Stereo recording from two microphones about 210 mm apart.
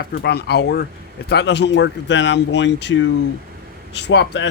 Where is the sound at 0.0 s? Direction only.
50° left (ahead or behind).